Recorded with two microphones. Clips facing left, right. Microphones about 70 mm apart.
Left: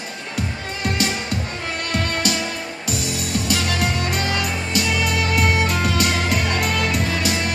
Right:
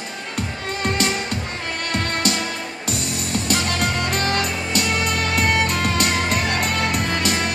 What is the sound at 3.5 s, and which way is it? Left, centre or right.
Music, right.